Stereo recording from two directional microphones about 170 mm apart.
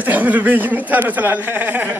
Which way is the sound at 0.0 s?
10° right (ahead or behind).